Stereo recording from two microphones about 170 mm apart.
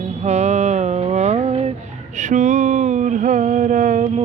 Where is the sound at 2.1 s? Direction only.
45° right (ahead or behind).